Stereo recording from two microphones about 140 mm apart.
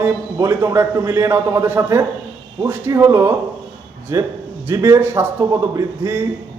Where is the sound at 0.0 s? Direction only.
25° right (ahead or behind).